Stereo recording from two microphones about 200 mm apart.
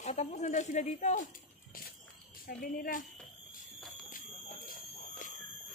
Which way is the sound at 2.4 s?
45° left (ahead or behind).